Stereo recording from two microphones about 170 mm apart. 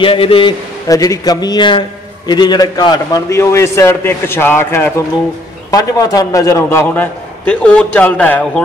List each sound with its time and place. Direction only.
0.0 s a man's voice: 30° left (ahead or behind); by 8.5 s 10° left (ahead or behind)